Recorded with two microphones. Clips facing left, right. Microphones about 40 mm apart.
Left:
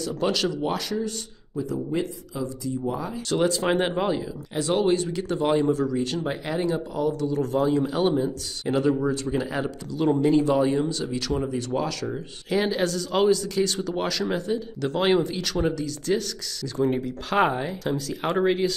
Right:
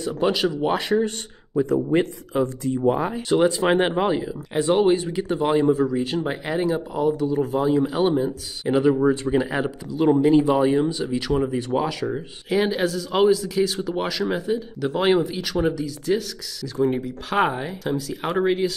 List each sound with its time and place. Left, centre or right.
0.0 s speech: right
3.2 s speech: centre
12.4 s speech: centre